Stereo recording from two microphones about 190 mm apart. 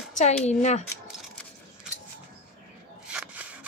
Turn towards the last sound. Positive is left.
turn(degrees=-5)  # may be behind; listen again after turning